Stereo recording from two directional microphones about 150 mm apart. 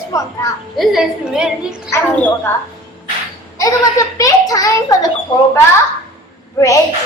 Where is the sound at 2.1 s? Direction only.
10° left (ahead or behind).